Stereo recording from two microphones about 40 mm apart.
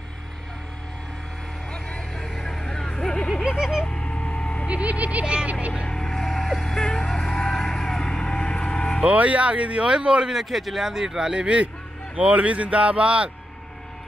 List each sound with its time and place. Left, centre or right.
1.7 s vehicle: left
2.1 s music: centre
3.0 s a sound: centre
3.4 s a sound: centre
3.8 s a sound: left
4.6 s a sound: right
5.2 s vehicle: right
5.9 s music: centre
6.6 s vehicle: centre
9.0 s speech: right
10.2 s a man's voice: centre
10.9 s a man's voice: centre
11.3 s speech: right